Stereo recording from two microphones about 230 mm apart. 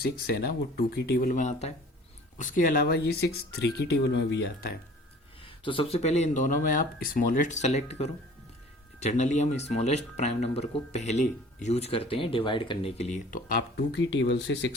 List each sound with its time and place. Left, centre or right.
0.0 s speech: left
3.1 s speech: left
5.5 s speech: left